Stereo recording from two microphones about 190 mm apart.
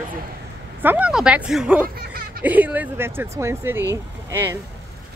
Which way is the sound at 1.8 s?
50° right (ahead or behind).